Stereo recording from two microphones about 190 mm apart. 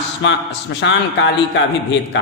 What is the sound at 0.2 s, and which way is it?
A man's voice, 70° left (ahead or behind).